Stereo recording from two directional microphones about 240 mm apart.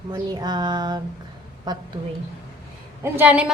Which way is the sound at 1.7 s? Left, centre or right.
Centre.